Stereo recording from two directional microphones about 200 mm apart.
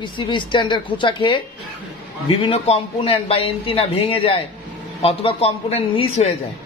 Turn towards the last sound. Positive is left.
turn(degrees=30)  # may be behind; listen again after turning